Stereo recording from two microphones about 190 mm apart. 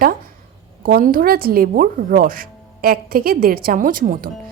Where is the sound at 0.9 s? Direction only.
50° right (ahead or behind).